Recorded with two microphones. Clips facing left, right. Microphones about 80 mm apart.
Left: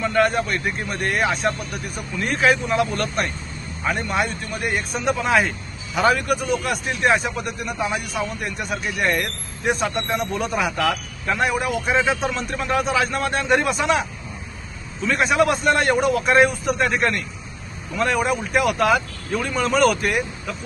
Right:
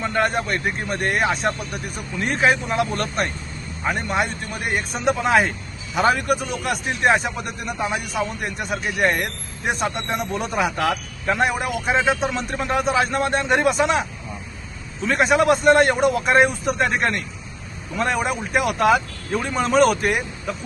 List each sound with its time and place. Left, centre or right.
0.0 s a man's voice: right
3.8 s a man's voice: right
6.8 s a man's voice: right; by 10.2 s centre
10.3 s a man's voice: right
11.9 s a man's voice: centre
15.0 s a man's voice: right